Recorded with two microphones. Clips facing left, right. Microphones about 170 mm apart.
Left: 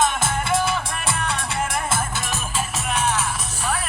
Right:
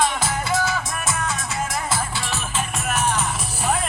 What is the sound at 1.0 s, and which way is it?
Music, 60° left (ahead or behind).